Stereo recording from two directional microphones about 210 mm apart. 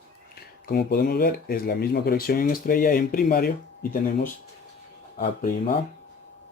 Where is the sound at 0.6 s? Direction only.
45° left (ahead or behind).